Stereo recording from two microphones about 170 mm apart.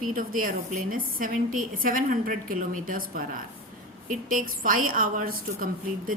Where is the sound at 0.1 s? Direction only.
55° right (ahead or behind).